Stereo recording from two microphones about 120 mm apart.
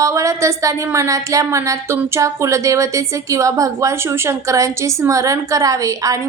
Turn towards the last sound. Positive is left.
turn(degrees=-30)  # may be behind; listen again after turning